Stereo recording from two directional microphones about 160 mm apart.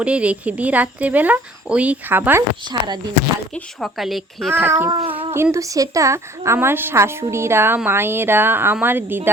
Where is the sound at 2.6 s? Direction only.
25° right (ahead or behind).